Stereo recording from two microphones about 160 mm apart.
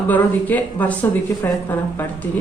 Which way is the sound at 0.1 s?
10° left (ahead or behind).